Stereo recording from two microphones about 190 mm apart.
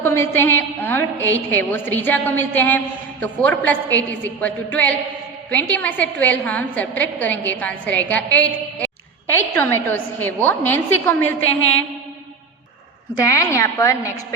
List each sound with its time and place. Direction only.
0.0 s a woman's voice: 10° left (ahead or behind)
13.1 s a woman's voice: 15° left (ahead or behind)